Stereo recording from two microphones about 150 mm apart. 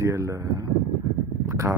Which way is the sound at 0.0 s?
20° right (ahead or behind).